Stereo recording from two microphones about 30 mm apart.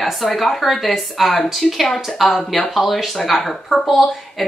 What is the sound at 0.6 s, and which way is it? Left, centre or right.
Speech, centre.